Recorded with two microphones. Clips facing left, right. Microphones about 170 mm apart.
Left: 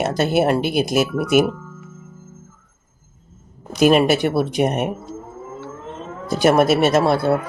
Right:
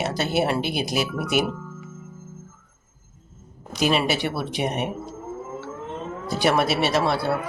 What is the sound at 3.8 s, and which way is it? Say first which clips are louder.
Speech: left 8 dB; 50° left (ahead or behind).